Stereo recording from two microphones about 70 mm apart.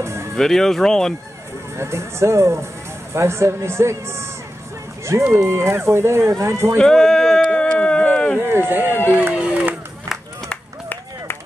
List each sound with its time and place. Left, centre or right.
0.0 s music: right
0.4 s speech: centre
1.8 s speech: right
5.2 s speech: right
6.8 s a sound: centre
8.4 s speech: right
9.0 s run: right